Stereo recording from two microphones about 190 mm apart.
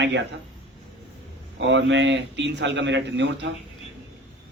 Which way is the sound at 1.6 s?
75° right (ahead or behind).